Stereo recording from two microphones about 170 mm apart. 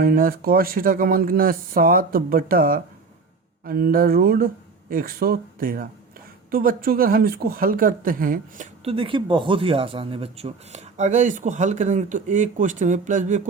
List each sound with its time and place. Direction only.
0.0 s speech: 60° right (ahead or behind)
8.8 s speech: 35° right (ahead or behind)